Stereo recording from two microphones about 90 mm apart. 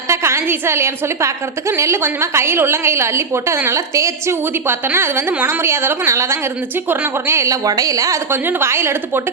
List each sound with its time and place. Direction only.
0.1 s a woman's voice: 30° right (ahead or behind)
8.3 s a woman's voice: 25° right (ahead or behind)